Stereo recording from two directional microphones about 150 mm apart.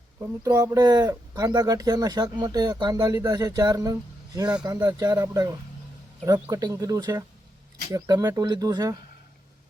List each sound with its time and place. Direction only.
0.2 s speech: 20° right (ahead or behind)